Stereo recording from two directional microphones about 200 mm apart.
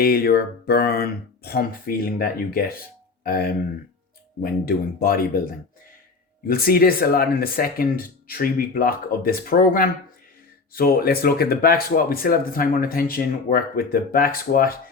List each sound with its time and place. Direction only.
0.0 s speech: 50° left (ahead or behind)
6.5 s speech: 50° left (ahead or behind)